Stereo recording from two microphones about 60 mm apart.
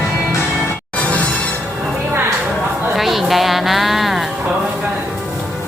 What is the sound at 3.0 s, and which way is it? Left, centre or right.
A woman's voice, centre.